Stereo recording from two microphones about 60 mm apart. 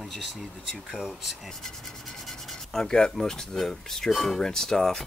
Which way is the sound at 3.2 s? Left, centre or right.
Centre.